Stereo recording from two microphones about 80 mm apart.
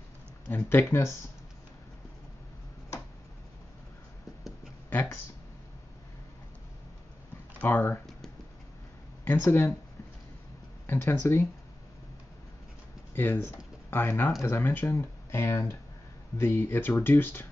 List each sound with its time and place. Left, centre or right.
0.5 s speech: left
7.6 s speech: left
9.2 s speech: left
10.9 s speech: left
13.1 s speech: left